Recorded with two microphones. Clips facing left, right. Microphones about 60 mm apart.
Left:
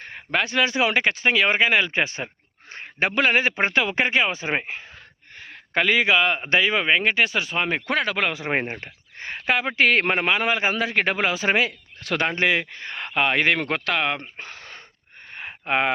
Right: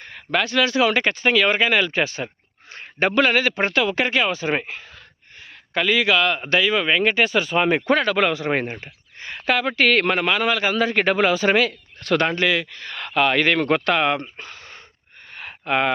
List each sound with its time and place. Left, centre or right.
0.3 s speech: centre
2.7 s a sound: centre
3.2 s speech: left
5.4 s a man's voice: left
6.8 s speech: left
7.1 s speech: centre
8.3 s speech: centre
8.8 s speech: left
9.5 s speech: centre
10.8 s speech: centre
12.4 s speech: left; by 14.3 s centre
14.3 s a sound: left
15.3 s a sound: left